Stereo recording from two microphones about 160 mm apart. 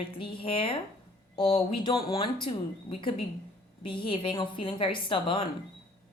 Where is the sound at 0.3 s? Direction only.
35° left (ahead or behind).